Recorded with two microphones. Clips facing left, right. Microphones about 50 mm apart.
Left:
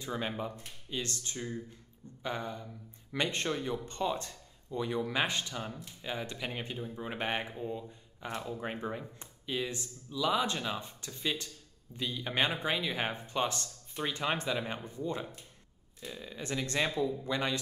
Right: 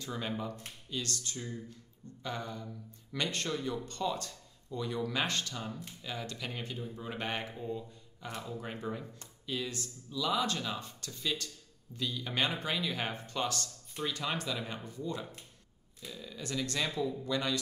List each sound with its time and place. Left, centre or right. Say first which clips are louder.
0.0 s speech: left 2 dB; centre